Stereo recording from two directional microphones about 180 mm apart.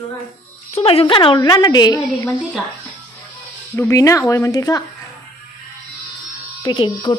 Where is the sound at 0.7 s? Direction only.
30° left (ahead or behind).